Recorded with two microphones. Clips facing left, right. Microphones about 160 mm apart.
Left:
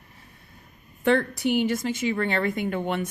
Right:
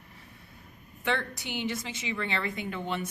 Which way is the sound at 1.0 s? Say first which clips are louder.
Left 10 dB; 45° left (ahead or behind).